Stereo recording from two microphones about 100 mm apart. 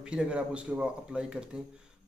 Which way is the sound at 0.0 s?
10° right (ahead or behind).